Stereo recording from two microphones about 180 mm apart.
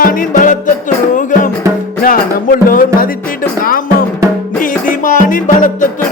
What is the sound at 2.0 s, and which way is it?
Music, 50° left (ahead or behind).